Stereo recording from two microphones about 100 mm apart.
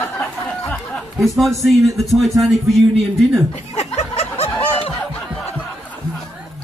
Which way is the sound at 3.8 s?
85° left.